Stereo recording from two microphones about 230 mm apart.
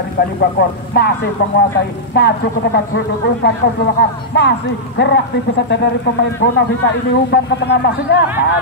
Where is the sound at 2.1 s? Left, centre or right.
Left.